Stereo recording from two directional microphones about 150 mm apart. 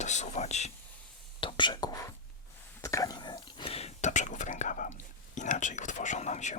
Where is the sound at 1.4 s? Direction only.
35° left (ahead or behind).